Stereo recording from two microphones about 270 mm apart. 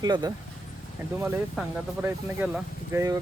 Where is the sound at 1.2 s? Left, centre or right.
Centre.